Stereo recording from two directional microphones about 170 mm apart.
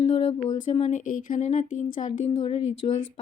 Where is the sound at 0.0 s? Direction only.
35° left (ahead or behind).